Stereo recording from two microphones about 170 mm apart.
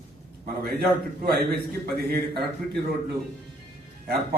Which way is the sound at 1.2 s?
70° right (ahead or behind).